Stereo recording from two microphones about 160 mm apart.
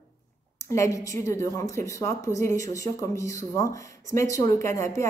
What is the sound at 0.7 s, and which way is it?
A woman's voice, 20° left (ahead or behind).